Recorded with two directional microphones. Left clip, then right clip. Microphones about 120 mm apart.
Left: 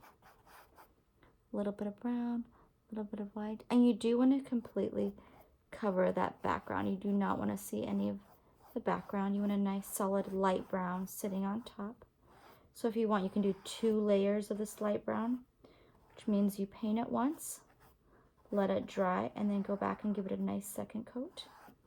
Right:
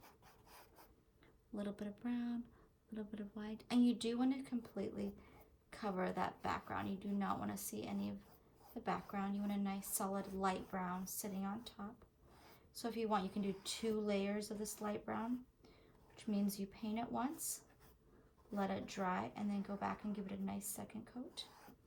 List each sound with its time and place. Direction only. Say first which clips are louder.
0.0 s rub: left 4 dB; 35° left (ahead or behind)
1.5 s a woman's voice: left 9 dB; 50° left (ahead or behind)
21.5 s a sound: left 4 dB; 30° left (ahead or behind)